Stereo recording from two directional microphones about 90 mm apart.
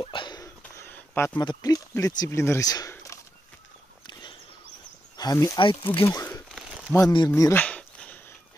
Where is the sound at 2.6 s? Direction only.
45° left (ahead or behind).